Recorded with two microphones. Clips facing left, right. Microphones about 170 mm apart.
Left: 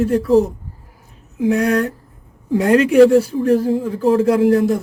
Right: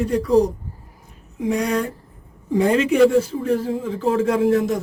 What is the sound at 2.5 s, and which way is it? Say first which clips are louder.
Speech: left 3 dB; 5° left (ahead or behind).